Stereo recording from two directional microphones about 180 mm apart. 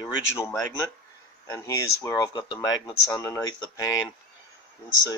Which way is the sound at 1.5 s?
20° left (ahead or behind).